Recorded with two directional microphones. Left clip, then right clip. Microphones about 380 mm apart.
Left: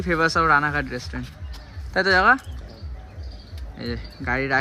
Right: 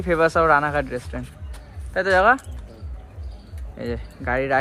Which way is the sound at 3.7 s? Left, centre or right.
Centre.